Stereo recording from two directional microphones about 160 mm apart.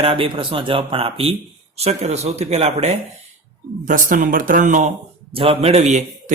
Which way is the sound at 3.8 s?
55° right (ahead or behind).